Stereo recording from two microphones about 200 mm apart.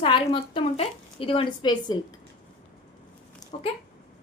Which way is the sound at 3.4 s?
Centre (ahead or behind).